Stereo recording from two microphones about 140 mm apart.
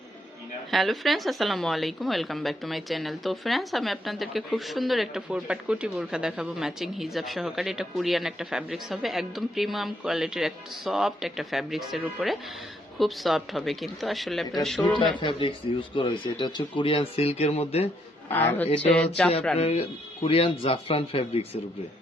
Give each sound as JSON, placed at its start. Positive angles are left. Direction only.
{"t": 0.7, "sound": "a woman's voice", "side_deg": 0}
{"t": 15.2, "sound": "speech", "side_deg": 35}
{"t": 18.3, "sound": "speech", "side_deg": 15}
{"t": 19.5, "sound": "speech", "side_deg": 45}